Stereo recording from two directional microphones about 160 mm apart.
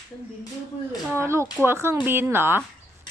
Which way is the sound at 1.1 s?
15° right (ahead or behind).